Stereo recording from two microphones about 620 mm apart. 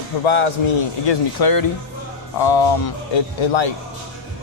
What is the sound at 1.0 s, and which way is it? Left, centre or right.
Speech, left.